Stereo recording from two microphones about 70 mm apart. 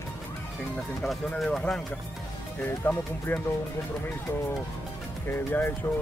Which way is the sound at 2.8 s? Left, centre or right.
Centre.